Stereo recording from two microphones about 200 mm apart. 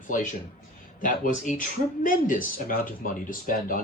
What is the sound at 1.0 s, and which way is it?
Speech, 40° left (ahead or behind).